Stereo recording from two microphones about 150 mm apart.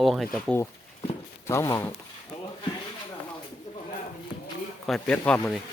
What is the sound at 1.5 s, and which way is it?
Speech, 20° left (ahead or behind).